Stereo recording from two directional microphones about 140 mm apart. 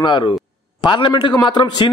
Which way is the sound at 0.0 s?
35° left (ahead or behind).